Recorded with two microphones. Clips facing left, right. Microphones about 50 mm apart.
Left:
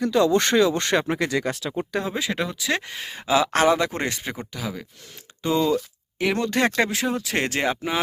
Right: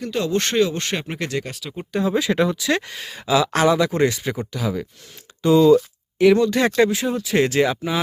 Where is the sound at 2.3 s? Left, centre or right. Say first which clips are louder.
Right 6 dB; centre; by 4.3 s left.